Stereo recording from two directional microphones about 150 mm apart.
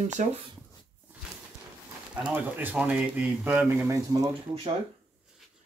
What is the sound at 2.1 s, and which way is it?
A man's voice, 10° right (ahead or behind).